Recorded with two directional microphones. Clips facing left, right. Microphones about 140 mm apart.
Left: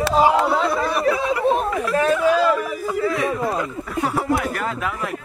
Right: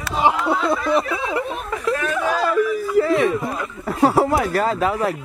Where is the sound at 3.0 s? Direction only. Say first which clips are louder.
Right 3 dB; 25° right (ahead or behind).